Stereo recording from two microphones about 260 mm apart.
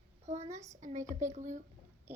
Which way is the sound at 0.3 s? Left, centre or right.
Right.